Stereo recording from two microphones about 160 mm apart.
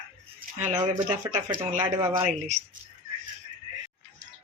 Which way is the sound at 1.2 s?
20° right (ahead or behind).